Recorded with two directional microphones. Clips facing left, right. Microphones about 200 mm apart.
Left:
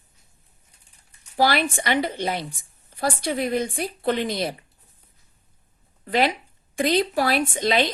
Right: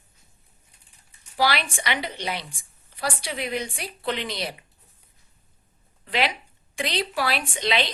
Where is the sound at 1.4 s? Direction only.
50° left (ahead or behind).